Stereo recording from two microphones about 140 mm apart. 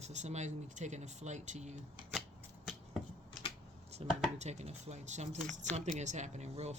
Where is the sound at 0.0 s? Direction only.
55° right (ahead or behind).